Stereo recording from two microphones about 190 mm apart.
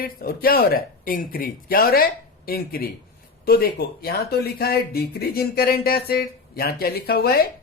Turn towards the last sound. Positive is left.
turn(degrees=55)  # may be behind; listen again after turning